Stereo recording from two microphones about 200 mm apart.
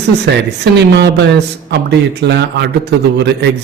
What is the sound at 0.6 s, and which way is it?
A man's voice, 55° right (ahead or behind).